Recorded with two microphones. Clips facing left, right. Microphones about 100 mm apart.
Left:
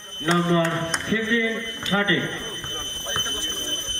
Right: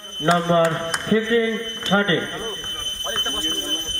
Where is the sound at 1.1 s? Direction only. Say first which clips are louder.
Right 6 dB; 40° right (ahead or behind).